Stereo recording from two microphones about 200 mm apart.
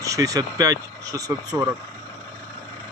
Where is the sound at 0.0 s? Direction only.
15° right (ahead or behind).